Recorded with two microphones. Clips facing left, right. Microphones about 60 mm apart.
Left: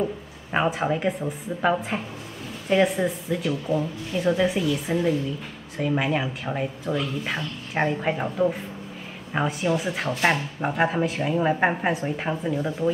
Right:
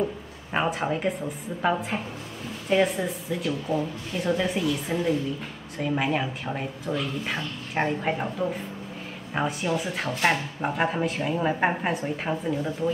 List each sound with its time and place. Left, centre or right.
0.5 s speech: centre
3.0 s speech: centre
3.6 s speech: centre
9.3 s speech: centre